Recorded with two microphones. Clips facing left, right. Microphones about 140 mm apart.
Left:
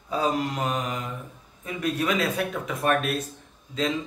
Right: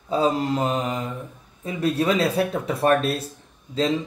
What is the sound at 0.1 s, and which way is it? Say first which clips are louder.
Speech: right 4 dB; 25° right (ahead or behind).